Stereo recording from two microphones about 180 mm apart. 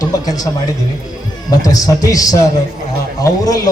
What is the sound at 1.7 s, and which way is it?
A man's voice, 20° left (ahead or behind).